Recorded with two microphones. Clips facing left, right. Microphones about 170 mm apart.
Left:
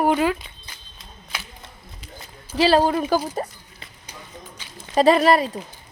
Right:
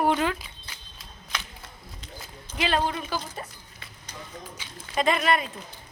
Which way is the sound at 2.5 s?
35° left (ahead or behind).